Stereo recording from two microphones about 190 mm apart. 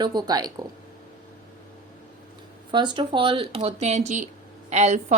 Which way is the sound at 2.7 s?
25° right (ahead or behind).